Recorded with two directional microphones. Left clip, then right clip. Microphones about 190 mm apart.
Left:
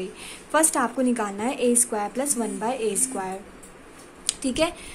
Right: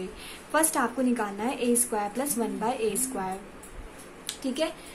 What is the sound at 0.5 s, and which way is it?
A woman's voice, 20° left (ahead or behind).